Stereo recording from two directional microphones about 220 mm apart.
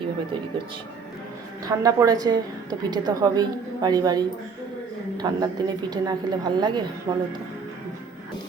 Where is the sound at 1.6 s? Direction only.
15° right (ahead or behind).